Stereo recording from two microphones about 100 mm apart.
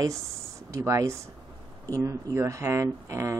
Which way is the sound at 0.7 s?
30° right (ahead or behind).